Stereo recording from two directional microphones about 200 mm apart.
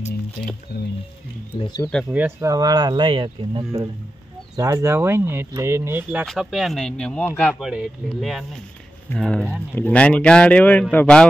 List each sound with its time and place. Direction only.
1.6 s speech: 20° left (ahead or behind)
2.1 s speech: 15° right (ahead or behind)
6.2 s a man's voice: centre (ahead or behind)